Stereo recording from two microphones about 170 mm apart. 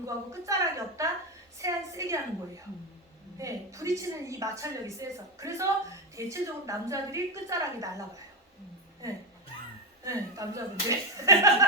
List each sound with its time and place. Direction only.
0.0 s a woman's voice: 20° right (ahead or behind)
3.3 s a woman's voice: 20° right (ahead or behind)
10.0 s a woman's voice: 20° right (ahead or behind)